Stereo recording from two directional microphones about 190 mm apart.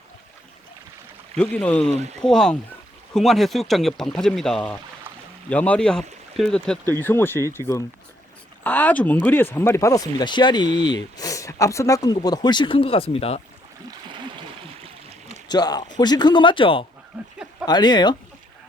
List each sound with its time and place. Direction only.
1.4 s speech: 5° left (ahead or behind)
1.9 s speech: 35° right (ahead or behind)
2.2 s speech: 5° left (ahead or behind); by 13.4 s 30° left (ahead or behind)
15.4 s speech: 20° left (ahead or behind)